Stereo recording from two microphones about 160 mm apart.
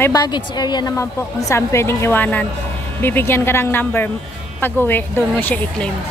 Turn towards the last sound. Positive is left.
turn(degrees=10)  # may be behind; listen again after turning